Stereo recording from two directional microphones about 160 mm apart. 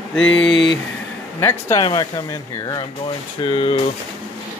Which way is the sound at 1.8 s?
25° left (ahead or behind).